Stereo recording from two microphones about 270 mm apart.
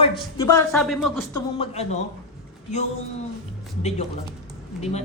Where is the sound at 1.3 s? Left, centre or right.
Left.